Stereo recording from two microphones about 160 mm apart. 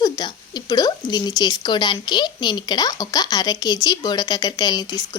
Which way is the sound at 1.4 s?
25° left (ahead or behind).